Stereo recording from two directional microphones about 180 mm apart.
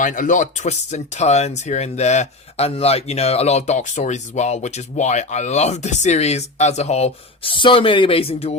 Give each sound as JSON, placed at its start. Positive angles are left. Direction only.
{"t": 0.0, "sound": "speech", "side_deg": 45}